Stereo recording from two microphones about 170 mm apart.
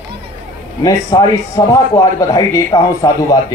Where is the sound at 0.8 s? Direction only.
25° left (ahead or behind).